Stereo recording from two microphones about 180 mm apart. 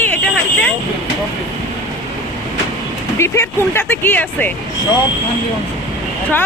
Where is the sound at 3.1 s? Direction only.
15° left (ahead or behind).